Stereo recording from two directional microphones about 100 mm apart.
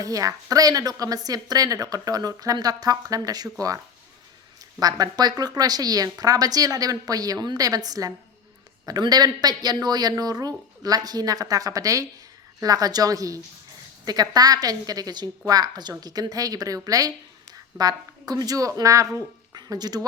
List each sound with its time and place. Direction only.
0.0 s a woman's voice: 35° right (ahead or behind)
4.8 s a woman's voice: 40° right (ahead or behind)